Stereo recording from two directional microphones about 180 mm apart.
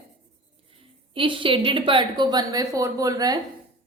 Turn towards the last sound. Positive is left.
turn(degrees=-20)  # may be behind; listen again after turning